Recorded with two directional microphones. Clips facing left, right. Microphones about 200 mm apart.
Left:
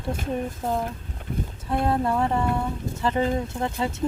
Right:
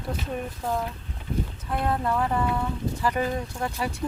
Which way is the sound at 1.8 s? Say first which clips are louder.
Left 2 dB; 30° left (ahead or behind).